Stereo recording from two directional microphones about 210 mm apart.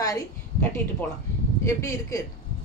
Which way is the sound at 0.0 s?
15° left (ahead or behind).